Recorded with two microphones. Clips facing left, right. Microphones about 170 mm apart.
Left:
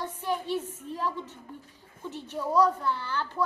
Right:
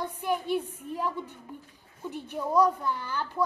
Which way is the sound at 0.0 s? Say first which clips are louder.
Right 1 dB; 15° right (ahead or behind).